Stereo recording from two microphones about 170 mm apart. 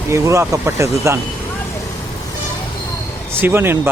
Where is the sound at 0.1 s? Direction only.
15° right (ahead or behind).